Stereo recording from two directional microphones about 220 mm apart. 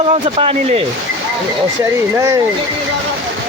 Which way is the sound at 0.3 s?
25° right (ahead or behind).